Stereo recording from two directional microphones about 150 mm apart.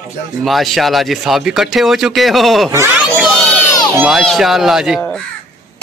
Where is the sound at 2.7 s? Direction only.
15° right (ahead or behind).